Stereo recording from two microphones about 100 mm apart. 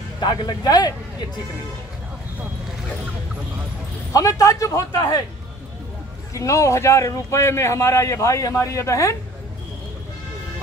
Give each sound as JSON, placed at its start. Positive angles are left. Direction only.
{"t": 0.2, "sound": "speech", "side_deg": 50}
{"t": 4.1, "sound": "a man's voice", "side_deg": 35}
{"t": 6.3, "sound": "a man's voice", "side_deg": 30}